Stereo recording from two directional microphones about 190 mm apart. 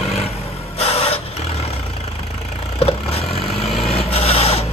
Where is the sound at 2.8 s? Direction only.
30° left (ahead or behind).